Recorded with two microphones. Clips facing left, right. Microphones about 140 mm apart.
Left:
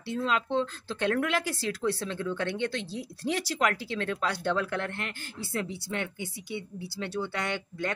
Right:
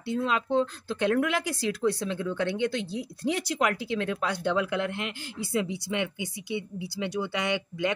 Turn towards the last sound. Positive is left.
turn(degrees=-15)  # may be behind; listen again after turning